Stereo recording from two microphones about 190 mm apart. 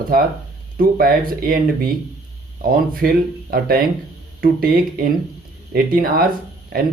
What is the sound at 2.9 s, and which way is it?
Speech, 50° right (ahead or behind).